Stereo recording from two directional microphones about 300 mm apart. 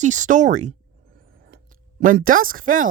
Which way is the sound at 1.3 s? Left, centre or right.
Right.